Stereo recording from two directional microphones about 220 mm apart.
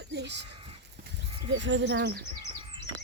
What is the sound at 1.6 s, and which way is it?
Speech, 55° right (ahead or behind).